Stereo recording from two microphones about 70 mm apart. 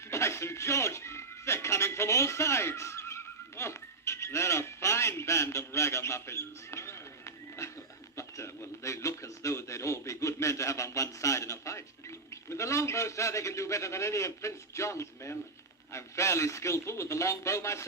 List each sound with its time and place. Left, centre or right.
0.1 s music: left
8.1 s a sound: left
12.3 s a man's voice: left